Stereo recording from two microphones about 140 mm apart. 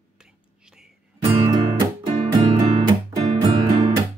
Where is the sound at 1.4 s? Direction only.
30° right (ahead or behind).